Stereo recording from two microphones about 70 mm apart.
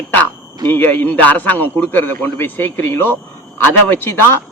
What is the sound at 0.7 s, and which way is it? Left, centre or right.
A man's voice, left.